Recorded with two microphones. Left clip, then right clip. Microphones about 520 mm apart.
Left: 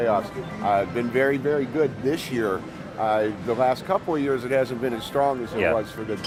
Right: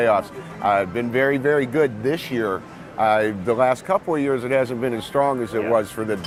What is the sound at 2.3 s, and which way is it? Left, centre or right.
Speech, right.